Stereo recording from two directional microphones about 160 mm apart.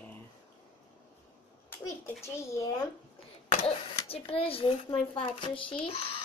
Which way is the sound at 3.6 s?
35° left (ahead or behind).